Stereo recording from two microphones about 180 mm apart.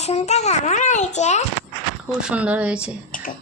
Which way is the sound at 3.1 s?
50° left (ahead or behind).